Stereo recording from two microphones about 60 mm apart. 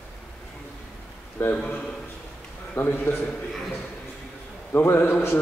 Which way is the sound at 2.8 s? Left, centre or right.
Left.